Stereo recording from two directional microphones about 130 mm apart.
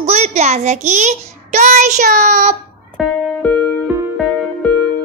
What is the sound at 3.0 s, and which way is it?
Music, centre (ahead or behind).